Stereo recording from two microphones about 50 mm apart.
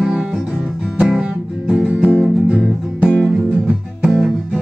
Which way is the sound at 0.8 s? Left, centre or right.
Centre.